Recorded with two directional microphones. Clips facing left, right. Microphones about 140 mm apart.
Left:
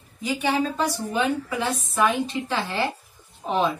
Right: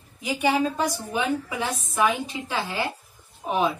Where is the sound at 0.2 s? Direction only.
10° right (ahead or behind).